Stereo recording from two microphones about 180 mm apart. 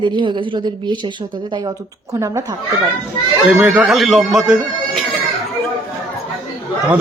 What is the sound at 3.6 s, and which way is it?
Speech, centre (ahead or behind).